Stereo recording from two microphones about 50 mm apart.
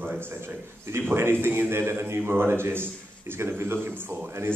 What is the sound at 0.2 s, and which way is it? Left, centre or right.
A man's voice, right.